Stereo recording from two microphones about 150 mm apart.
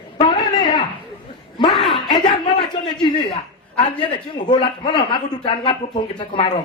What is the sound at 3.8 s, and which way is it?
Speech, 35° left (ahead or behind).